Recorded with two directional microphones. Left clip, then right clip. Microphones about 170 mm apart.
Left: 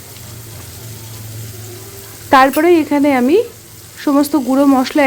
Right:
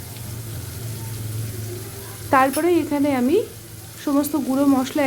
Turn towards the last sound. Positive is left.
turn(degrees=40)  # may be behind; listen again after turning